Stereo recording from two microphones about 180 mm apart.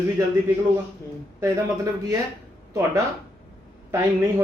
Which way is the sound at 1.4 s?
15° right (ahead or behind).